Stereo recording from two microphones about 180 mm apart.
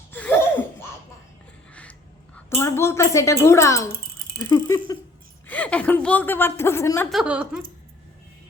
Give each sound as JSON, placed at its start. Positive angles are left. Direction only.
{"t": 0.1, "sound": "laughter", "side_deg": 10}
{"t": 1.7, "sound": "a sound", "side_deg": 5}
{"t": 2.6, "sound": "a woman's voice", "side_deg": 15}
{"t": 5.5, "sound": "a woman's voice", "side_deg": 5}
{"t": 7.1, "sound": "a woman's voice", "side_deg": -5}